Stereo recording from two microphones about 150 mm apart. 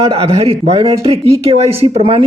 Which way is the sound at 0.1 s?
40° right (ahead or behind).